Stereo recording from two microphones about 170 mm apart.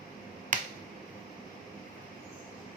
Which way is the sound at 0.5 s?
50° right (ahead or behind).